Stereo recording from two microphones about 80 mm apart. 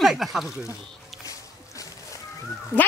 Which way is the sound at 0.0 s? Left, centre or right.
Centre.